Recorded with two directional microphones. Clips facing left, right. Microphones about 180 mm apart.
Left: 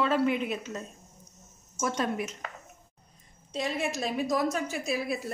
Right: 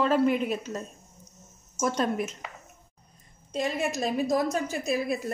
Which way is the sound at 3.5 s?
45° right (ahead or behind).